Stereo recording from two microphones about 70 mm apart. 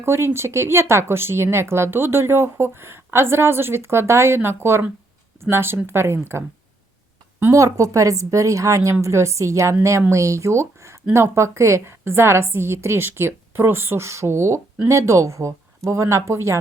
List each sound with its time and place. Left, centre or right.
0.0 s speech: right
7.5 s a woman's voice: right